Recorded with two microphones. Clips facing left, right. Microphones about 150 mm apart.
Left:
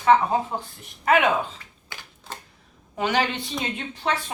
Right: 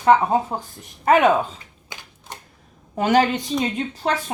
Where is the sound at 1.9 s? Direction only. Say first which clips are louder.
Right 1 dB; 20° right (ahead or behind).